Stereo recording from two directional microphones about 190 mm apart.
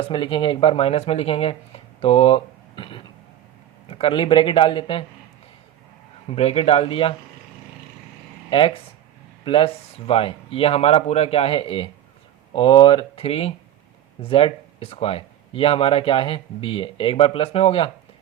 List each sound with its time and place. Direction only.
0.0 s speech: 25° left (ahead or behind)
6.3 s speech: 30° left (ahead or behind)
8.4 s speech: 25° left (ahead or behind)